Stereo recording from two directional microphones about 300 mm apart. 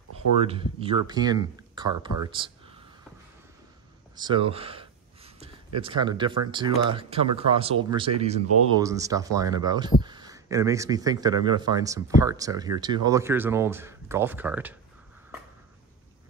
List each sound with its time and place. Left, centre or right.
0.4 s speech: centre
4.1 s gasp: centre
5.8 s speech: centre